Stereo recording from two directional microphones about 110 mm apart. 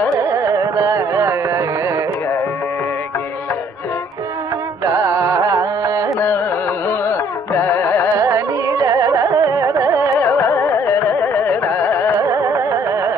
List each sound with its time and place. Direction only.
0.2 s carnatic music: 30° right (ahead or behind)
4.8 s carnatic music: 30° right (ahead or behind)
6.1 s carnatic music: 20° left (ahead or behind)
8.2 s carnatic music: 30° right (ahead or behind)
10.1 s carnatic music: 25° left (ahead or behind)
12.2 s carnatic music: 30° right (ahead or behind)